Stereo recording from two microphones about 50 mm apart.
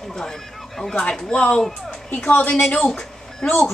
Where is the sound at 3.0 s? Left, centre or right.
Centre.